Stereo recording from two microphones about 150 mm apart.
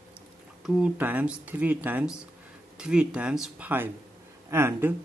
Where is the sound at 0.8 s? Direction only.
10° right (ahead or behind).